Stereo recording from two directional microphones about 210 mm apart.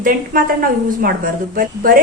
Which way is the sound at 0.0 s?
45° right (ahead or behind).